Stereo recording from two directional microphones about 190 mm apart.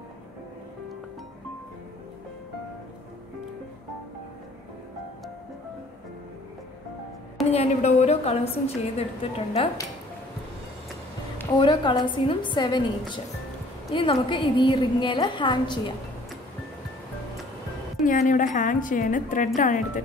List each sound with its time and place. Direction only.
7.5 s a woman's voice: 35° left (ahead or behind)
11.5 s a woman's voice: 25° left (ahead or behind)
18.0 s a woman's voice: 40° left (ahead or behind)